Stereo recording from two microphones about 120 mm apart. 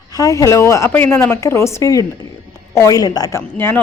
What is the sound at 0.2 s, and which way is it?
A woman's voice, 25° left (ahead or behind).